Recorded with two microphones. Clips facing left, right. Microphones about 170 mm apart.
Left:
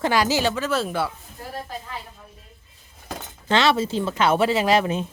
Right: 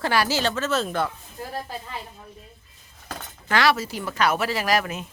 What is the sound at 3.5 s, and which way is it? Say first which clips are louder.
Speech: left 2 dB; 25° left (ahead or behind).